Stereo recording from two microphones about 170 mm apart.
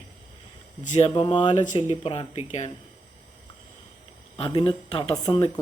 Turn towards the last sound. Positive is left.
turn(degrees=25)  # may be behind; listen again after turning